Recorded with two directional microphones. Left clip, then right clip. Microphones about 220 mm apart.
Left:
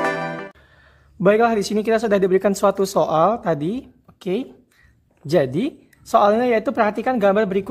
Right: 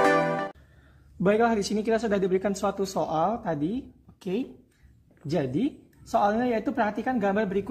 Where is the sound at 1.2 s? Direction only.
30° left (ahead or behind).